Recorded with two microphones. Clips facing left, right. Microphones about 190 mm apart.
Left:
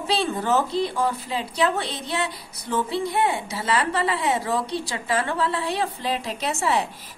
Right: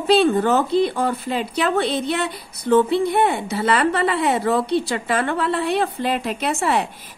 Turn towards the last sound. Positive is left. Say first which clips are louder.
# right 3 dB
turn(degrees=-60)  # may be behind; listen again after turning